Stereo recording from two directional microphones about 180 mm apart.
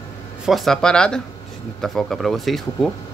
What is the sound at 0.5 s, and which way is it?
Speech, centre (ahead or behind).